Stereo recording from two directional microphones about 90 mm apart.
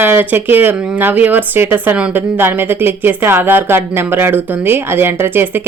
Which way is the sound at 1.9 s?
10° right (ahead or behind).